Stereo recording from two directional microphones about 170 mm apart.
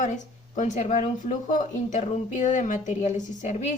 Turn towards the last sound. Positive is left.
turn(degrees=40)  # may be behind; listen again after turning